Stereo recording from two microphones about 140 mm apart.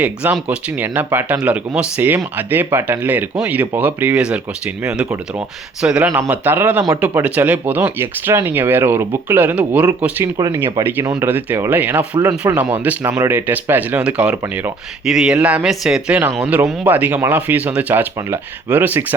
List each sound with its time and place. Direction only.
0.0 s speech: 10° right (ahead or behind)
5.8 s speech: 5° right (ahead or behind)
10.3 s speech: 25° right (ahead or behind)